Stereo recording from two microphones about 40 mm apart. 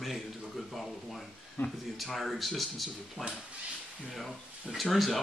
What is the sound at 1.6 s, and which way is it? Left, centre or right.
Speech, left.